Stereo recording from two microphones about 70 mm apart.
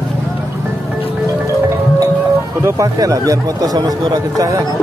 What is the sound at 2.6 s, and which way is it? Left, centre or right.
Speech, right.